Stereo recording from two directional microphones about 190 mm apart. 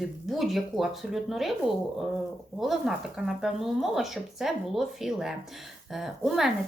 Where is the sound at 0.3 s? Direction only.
Centre (ahead or behind).